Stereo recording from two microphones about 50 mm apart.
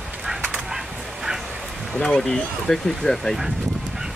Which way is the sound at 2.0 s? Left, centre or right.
Centre.